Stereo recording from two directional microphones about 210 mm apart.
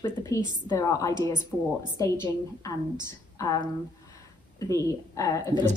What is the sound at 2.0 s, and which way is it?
Speech, 15° left (ahead or behind).